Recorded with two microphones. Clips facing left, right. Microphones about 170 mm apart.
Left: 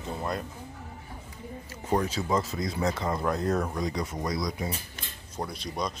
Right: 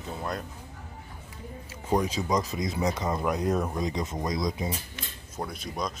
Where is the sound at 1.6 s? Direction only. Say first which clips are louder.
Right 1 dB; 10° right (ahead or behind).